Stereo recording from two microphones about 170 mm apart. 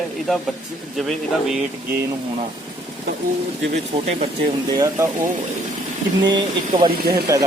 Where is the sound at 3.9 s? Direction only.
40° right (ahead or behind).